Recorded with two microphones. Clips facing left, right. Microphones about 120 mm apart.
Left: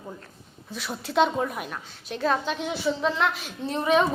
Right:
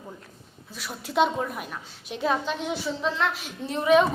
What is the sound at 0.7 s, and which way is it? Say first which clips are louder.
A woman's voice: left 2 dB; 5° right (ahead or behind).